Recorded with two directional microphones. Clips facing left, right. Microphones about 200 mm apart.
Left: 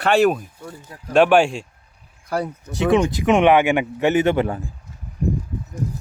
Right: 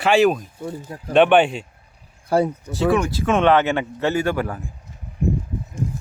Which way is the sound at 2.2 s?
30° right (ahead or behind).